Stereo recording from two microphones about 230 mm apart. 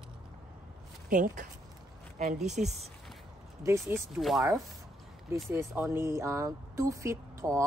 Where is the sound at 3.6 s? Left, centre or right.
Centre.